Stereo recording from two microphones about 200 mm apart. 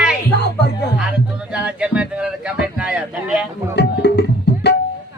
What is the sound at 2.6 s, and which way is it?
Speech, 5° right (ahead or behind).